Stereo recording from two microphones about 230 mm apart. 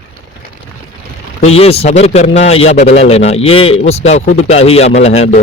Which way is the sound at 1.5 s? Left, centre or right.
Left.